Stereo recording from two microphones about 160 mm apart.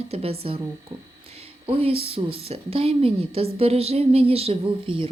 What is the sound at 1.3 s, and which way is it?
A woman's voice, 35° right (ahead or behind).